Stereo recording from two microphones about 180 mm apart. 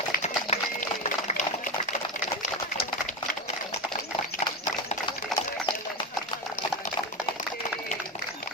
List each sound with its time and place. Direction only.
0.2 s sewing machine: 40° left (ahead or behind)